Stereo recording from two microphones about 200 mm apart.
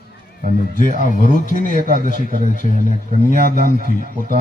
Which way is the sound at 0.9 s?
40° left (ahead or behind).